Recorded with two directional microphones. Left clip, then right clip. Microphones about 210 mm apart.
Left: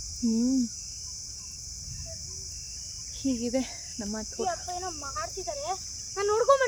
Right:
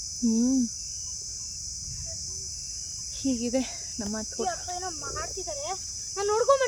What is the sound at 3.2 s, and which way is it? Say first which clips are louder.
Speech: right 1 dB; 30° right (ahead or behind).